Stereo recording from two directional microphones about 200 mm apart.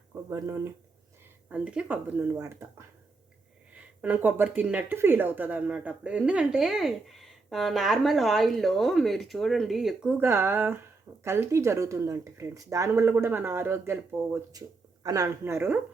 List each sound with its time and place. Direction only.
0.1 s speech: 15° right (ahead or behind)
4.0 s speech: 10° right (ahead or behind)
15.0 s speech: 15° right (ahead or behind)